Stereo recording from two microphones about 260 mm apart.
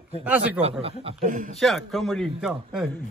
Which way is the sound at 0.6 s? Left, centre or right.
Right.